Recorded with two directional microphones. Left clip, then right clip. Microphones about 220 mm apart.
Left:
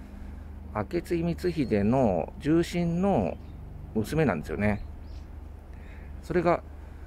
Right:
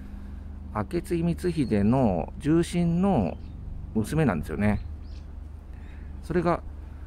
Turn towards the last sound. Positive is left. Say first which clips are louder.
# left 1 dB
turn(degrees=-5)  # may be behind; listen again after turning